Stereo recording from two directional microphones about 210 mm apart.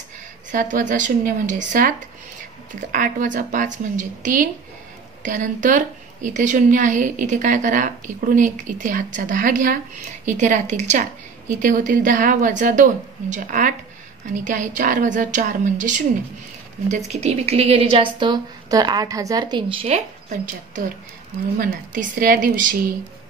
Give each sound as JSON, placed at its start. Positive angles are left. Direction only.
{"t": 0.5, "sound": "a woman's voice", "side_deg": -40}